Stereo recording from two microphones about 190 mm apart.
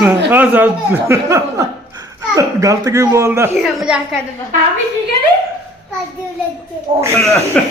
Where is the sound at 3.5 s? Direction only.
Centre (ahead or behind).